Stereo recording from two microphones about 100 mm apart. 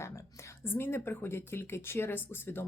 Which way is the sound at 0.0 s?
30° left (ahead or behind).